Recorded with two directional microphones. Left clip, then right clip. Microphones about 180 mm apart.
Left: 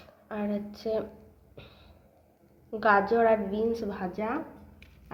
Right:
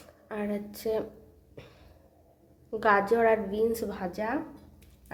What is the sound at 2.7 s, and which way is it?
A woman's voice, 15° right (ahead or behind).